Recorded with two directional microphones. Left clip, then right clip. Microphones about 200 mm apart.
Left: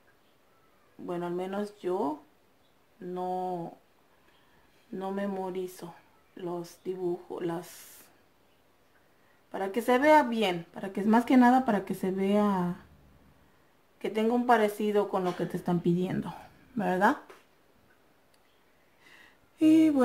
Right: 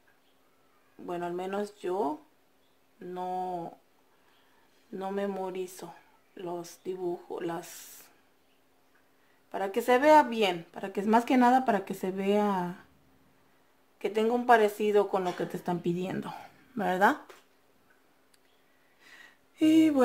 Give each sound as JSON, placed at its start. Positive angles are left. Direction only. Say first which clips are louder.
{"t": 1.0, "sound": "speech", "louder": "even", "side_deg": -25}
{"t": 3.2, "sound": "speech", "louder": "left 1 dB", "side_deg": -25}
{"t": 4.9, "sound": "speech", "louder": "right 1 dB", "side_deg": -25}
{"t": 9.5, "sound": "speech", "louder": "right 1 dB", "side_deg": -25}
{"t": 13.9, "sound": "speech", "louder": "right 1 dB", "side_deg": -25}
{"t": 19.0, "sound": "a sound", "louder": "right 3 dB", "side_deg": -30}